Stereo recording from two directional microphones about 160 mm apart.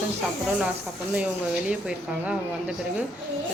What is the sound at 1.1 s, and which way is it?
Speech, 10° right (ahead or behind).